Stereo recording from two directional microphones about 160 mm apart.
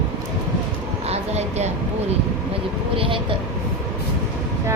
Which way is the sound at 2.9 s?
35° right (ahead or behind).